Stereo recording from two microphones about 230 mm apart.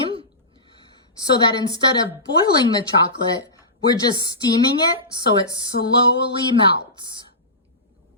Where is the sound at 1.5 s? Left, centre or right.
Centre.